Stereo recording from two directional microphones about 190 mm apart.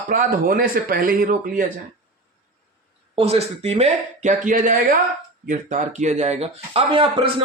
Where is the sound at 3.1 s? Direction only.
30° right (ahead or behind).